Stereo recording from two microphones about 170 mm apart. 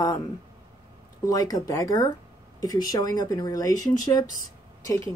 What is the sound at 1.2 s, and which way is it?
Speech, 20° left (ahead or behind).